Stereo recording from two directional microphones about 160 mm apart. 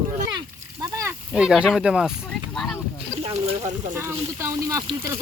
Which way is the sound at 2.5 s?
Centre (ahead or behind).